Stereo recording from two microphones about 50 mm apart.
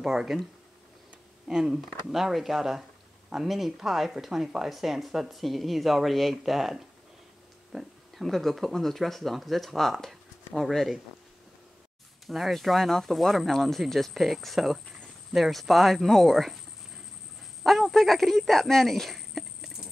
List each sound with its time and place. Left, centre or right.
0.0 s speech: centre
1.5 s speech: centre
12.3 s speech: centre
17.6 s speech: centre